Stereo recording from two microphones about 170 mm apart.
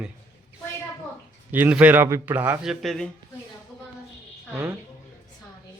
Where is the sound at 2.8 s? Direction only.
Centre (ahead or behind).